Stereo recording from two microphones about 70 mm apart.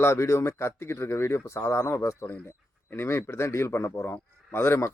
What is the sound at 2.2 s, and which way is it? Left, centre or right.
Speech, left.